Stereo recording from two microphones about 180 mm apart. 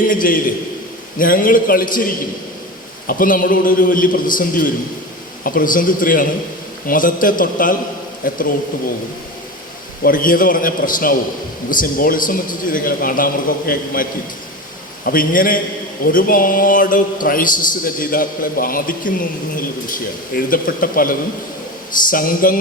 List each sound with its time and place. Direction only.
0.1 s a man's voice: 50° left (ahead or behind)
10.0 s a man's voice: 50° left (ahead or behind)